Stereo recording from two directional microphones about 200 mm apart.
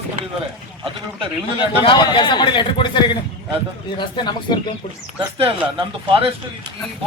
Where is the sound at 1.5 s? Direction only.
25° left (ahead or behind).